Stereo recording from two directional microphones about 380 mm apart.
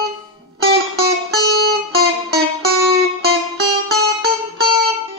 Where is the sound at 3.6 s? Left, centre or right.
Right.